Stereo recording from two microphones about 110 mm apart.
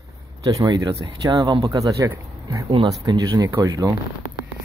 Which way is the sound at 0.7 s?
40° right (ahead or behind).